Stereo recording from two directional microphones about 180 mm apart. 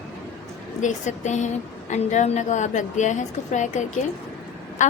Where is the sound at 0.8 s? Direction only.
40° left (ahead or behind).